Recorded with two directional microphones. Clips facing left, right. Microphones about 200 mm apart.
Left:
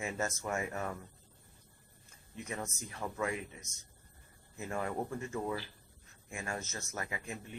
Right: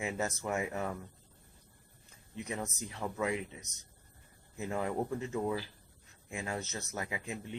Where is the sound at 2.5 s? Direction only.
15° right (ahead or behind).